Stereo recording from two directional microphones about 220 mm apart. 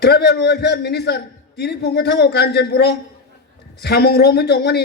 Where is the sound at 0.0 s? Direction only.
50° left (ahead or behind).